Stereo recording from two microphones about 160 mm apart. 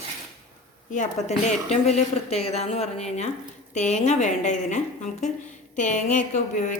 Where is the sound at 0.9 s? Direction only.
50° left (ahead or behind).